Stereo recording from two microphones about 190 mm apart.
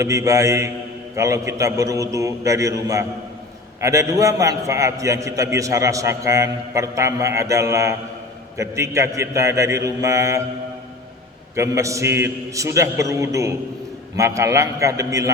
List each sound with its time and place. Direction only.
0.0 s a man's voice: 15° right (ahead or behind)
11.5 s a man's voice: 15° right (ahead or behind)